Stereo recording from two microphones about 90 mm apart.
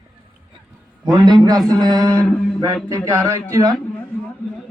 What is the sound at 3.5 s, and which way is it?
Speech, 35° right (ahead or behind).